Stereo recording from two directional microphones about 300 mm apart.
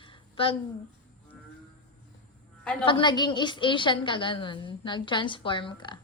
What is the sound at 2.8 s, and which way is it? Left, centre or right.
Speech, centre.